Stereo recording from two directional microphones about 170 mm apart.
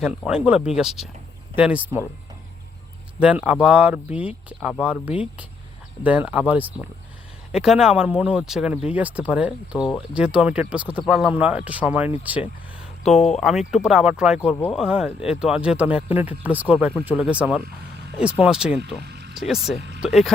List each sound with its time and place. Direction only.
0.3 s speech: 5° right (ahead or behind)
3.2 s speech: 10° right (ahead or behind)
19.0 s music: 80° right
19.4 s speech: centre (ahead or behind)